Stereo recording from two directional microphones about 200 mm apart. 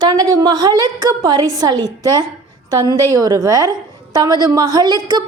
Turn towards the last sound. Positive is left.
turn(degrees=-20)  # may be behind; listen again after turning